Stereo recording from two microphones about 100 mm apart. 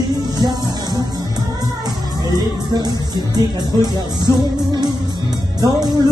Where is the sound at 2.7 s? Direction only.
45° right (ahead or behind).